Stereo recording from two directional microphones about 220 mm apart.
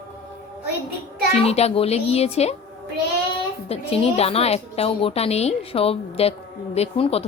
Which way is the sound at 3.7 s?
25° left (ahead or behind).